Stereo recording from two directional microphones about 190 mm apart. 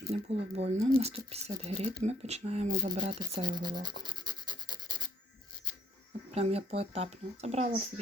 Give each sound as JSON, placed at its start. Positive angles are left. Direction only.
{"t": 0.1, "sound": "speech", "side_deg": -35}
{"t": 3.1, "sound": "rub", "side_deg": -25}
{"t": 6.3, "sound": "speech", "side_deg": -30}